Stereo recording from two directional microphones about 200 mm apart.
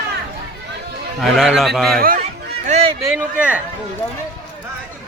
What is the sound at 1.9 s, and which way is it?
Speech, 45° right (ahead or behind).